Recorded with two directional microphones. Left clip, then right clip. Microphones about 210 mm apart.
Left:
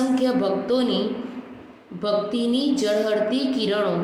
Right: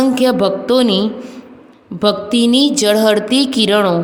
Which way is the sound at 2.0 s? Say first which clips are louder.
Right 8 dB; 55° right (ahead or behind).